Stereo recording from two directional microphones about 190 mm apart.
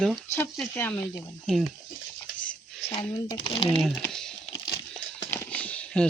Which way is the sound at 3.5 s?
30° left (ahead or behind).